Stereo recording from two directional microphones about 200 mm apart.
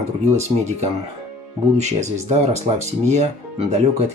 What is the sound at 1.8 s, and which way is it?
Speech, 35° right (ahead or behind).